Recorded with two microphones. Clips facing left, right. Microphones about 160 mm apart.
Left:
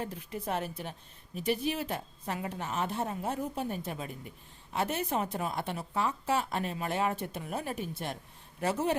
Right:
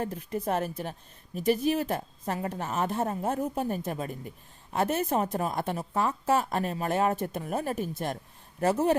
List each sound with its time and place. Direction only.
0.0 s a woman's voice: 45° right (ahead or behind)